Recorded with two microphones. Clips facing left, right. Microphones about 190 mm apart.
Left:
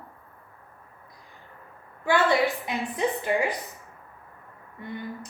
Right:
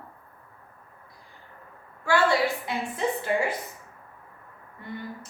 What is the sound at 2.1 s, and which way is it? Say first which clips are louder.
A woman's voice: left 1 dB; 20° left (ahead or behind).